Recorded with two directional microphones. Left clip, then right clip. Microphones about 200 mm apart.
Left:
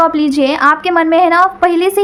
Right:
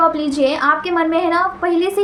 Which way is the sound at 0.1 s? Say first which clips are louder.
Left 4 dB; 50° left (ahead or behind).